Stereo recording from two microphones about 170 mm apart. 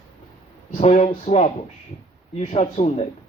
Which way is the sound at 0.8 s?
40° left (ahead or behind).